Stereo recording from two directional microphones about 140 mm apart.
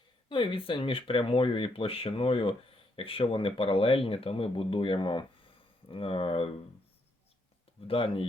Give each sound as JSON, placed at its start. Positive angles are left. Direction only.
{"t": 0.3, "sound": "speech", "side_deg": 35}
{"t": 7.9, "sound": "speech", "side_deg": 40}